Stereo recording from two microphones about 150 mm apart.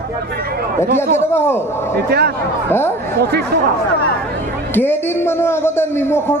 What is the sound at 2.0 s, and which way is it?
Speech, 90° right.